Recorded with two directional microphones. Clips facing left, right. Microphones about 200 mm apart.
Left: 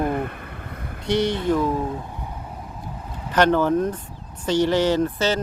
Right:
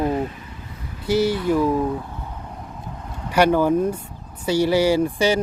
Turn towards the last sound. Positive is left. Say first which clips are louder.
# right 2 dB
turn(degrees=-10)  # may be behind; listen again after turning